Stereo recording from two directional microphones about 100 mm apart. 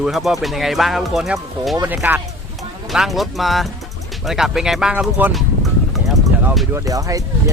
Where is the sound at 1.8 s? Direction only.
15° right (ahead or behind).